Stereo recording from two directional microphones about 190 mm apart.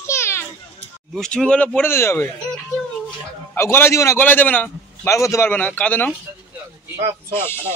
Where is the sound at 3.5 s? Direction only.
10° left (ahead or behind).